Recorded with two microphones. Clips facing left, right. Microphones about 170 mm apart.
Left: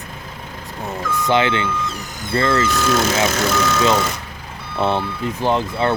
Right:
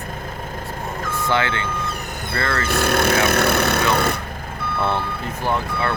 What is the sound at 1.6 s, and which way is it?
Vehicle, 60° right (ahead or behind).